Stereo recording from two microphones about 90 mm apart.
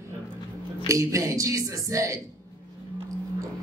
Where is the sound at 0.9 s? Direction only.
35° right (ahead or behind).